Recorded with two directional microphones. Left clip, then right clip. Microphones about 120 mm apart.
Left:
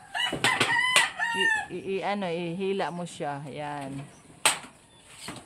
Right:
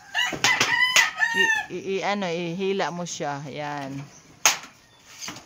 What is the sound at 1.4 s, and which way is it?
Chicken, 90° right.